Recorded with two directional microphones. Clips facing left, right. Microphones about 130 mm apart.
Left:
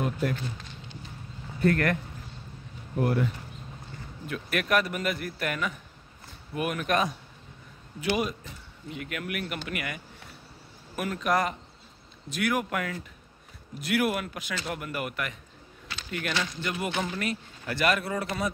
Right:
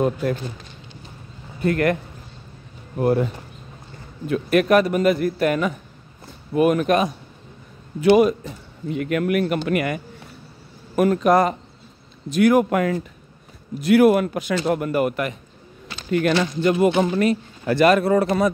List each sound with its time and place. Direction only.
1.6 s a man's voice: 15° right (ahead or behind)
3.0 s a man's voice: 30° right (ahead or behind)
8.0 s speech: 50° right (ahead or behind)